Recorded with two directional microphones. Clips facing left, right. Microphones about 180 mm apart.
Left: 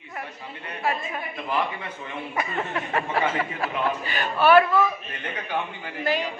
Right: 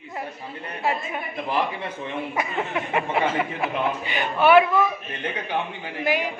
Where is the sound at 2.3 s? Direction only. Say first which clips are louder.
Even; 15° right (ahead or behind).